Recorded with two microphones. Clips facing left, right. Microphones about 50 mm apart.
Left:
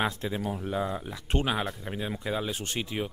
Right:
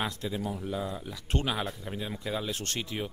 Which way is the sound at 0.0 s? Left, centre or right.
Left.